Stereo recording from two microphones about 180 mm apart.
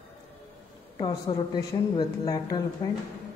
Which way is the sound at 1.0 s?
25° left (ahead or behind).